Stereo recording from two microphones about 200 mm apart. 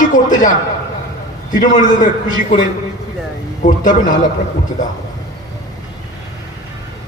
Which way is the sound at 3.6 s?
40° left (ahead or behind).